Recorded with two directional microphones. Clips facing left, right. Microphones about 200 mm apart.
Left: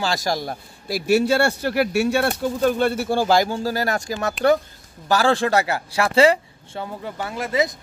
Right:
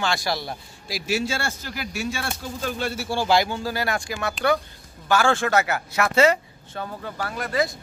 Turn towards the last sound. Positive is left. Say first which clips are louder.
# left 2 dB
turn(degrees=25)  # may be behind; listen again after turning